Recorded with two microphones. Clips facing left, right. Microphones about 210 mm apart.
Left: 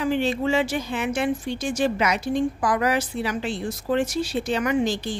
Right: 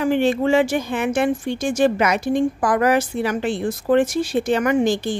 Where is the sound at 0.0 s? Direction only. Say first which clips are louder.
Right 5 dB; 50° right (ahead or behind).